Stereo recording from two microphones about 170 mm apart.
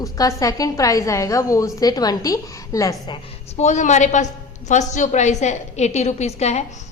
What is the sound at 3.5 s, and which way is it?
A woman's voice, 45° left (ahead or behind).